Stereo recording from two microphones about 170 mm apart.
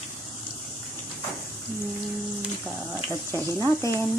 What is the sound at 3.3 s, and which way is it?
Speech, 15° left (ahead or behind).